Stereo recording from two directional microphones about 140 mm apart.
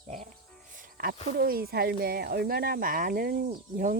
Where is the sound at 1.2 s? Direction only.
90° right.